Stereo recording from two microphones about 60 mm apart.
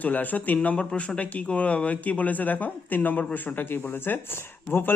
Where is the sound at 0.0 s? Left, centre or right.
Left.